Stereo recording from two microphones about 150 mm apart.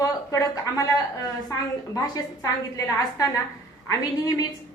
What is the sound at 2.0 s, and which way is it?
A woman's voice, 25° left (ahead or behind).